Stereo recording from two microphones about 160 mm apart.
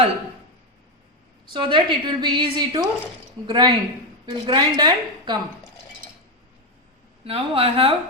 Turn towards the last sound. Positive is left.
turn(degrees=-35)  # may be behind; listen again after turning